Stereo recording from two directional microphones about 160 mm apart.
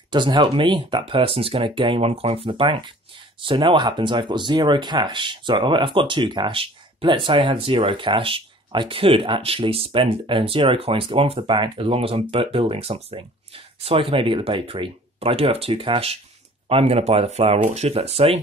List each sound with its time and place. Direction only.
0.1 s speech: 30° right (ahead or behind)